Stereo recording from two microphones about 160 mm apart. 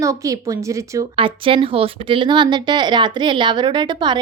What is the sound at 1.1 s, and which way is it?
A woman's voice, 35° right (ahead or behind).